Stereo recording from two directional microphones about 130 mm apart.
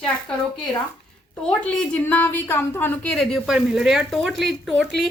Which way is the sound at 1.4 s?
5° left (ahead or behind).